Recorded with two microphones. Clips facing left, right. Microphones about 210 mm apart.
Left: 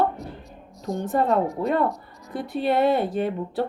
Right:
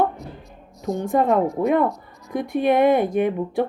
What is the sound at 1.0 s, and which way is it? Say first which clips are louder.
A woman's voice: right 3 dB; 10° right (ahead or behind).